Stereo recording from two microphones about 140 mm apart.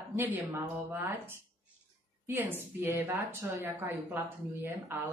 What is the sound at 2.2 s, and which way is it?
A woman's voice, 15° right (ahead or behind).